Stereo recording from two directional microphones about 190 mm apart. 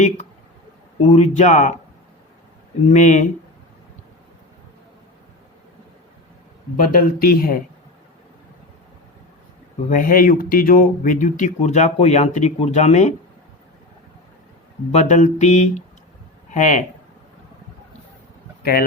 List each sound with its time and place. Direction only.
1.0 s speech: 35° left (ahead or behind)
2.8 s speech: 40° left (ahead or behind)
6.7 s speech: 50° left (ahead or behind)
9.9 s speech: 45° left (ahead or behind)
14.9 s speech: 40° left (ahead or behind)